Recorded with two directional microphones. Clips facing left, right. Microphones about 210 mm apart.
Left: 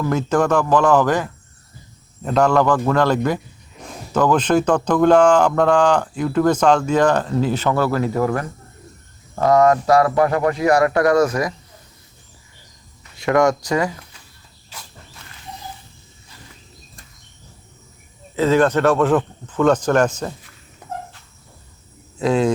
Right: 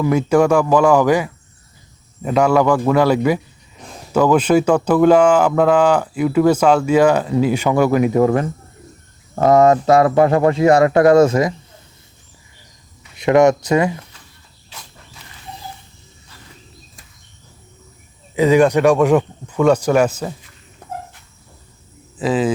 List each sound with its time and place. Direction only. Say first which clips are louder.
0.0 s speech: right 4 dB; 10° right (ahead or behind); by 11.5 s 25° right (ahead or behind)
13.1 s speech: right 4 dB; 20° right (ahead or behind)
18.3 s speech: right 3 dB; 15° right (ahead or behind)
22.2 s speech: even; 5° right (ahead or behind)